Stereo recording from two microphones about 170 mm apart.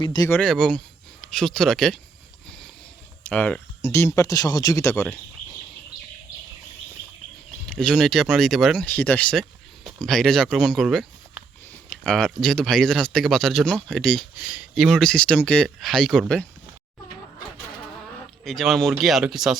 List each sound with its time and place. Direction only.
0.0 s speech: 25° left (ahead or behind)
0.3 s speech: 5° left (ahead or behind)
3.2 s speech: 10° left (ahead or behind)
7.7 s speech: 5° left (ahead or behind)
14.4 s speech: 5° right (ahead or behind)
18.4 s speech: centre (ahead or behind)